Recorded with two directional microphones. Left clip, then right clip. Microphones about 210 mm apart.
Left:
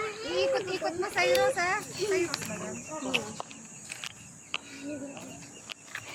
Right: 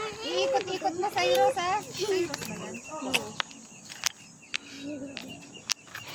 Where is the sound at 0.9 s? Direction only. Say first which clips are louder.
Even; 20° right (ahead or behind).